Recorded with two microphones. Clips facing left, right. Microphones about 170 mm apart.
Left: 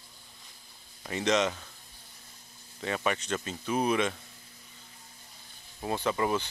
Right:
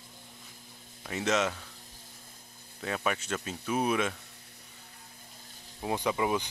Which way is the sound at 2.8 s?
Centre (ahead or behind).